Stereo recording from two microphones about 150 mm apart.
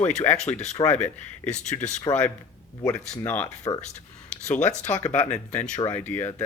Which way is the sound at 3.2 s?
15° left (ahead or behind).